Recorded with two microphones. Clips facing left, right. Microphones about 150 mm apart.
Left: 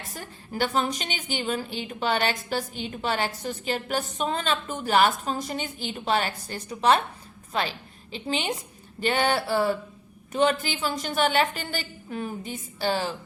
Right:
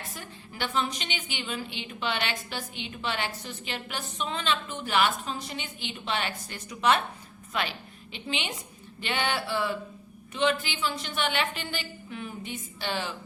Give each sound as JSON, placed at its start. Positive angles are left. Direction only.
{"t": 0.1, "sound": "a woman's voice", "side_deg": 40}